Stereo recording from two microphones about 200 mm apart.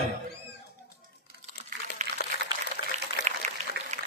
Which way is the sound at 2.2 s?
55° left (ahead or behind).